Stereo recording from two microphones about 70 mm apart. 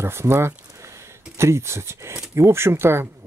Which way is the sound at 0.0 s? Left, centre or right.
Right.